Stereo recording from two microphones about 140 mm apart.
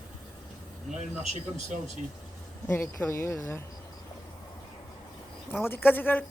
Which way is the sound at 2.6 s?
15° left (ahead or behind).